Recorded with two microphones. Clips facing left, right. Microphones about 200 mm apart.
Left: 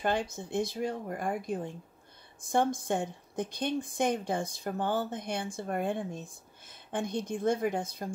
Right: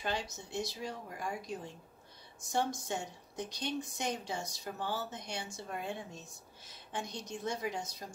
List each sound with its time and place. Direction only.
0.0 s speech: 55° left (ahead or behind)